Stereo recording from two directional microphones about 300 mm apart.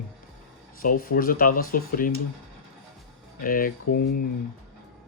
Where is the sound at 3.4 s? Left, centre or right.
Left.